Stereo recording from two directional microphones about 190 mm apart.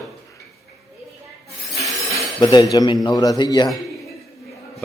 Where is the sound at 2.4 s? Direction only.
20° left (ahead or behind).